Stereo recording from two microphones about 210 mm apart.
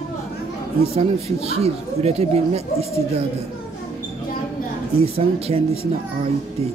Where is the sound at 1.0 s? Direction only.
30° right (ahead or behind).